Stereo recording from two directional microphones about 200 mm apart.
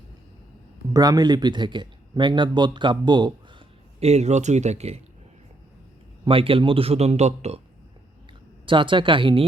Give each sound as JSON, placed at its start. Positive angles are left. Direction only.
{"t": 0.9, "sound": "speech", "side_deg": -20}
{"t": 6.2, "sound": "speech", "side_deg": -25}
{"t": 8.6, "sound": "speech", "side_deg": -25}